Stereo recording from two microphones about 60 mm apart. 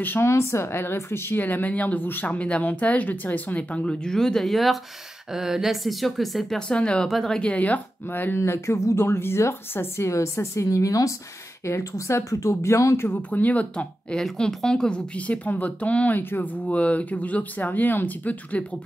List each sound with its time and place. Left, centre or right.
0.2 s speech: left; by 6.6 s centre
6.7 s speech: centre
7.1 s speech: centre
7.3 s speech: left
8.4 s a woman's voice: left
11.6 s a woman's voice: left
13.3 s speech: left
14.1 s speech: centre
15.1 s speech: left
16.2 s speech: left
16.6 s speech: left